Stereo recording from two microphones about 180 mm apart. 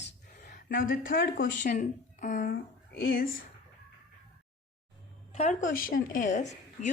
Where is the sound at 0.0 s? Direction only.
50° left (ahead or behind).